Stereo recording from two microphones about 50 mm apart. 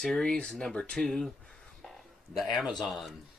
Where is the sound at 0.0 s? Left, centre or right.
Centre.